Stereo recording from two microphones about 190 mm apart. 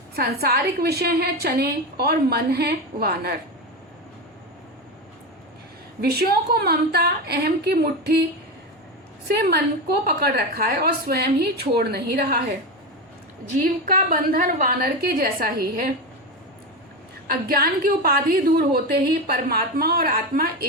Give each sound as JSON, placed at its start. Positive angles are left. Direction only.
{"t": 0.2, "sound": "a woman's voice", "side_deg": -55}
{"t": 6.0, "sound": "a woman's voice", "side_deg": -55}
{"t": 9.2, "sound": "a woman's voice", "side_deg": -55}
{"t": 13.6, "sound": "a woman's voice", "side_deg": -45}
{"t": 17.5, "sound": "a woman's voice", "side_deg": -50}